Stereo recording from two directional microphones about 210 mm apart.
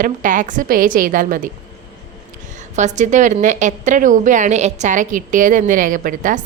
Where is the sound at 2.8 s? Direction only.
35° right (ahead or behind).